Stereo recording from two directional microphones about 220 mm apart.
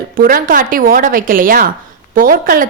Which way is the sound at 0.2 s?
40° right (ahead or behind).